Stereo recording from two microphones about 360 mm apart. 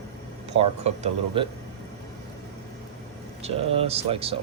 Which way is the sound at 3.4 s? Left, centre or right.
Centre.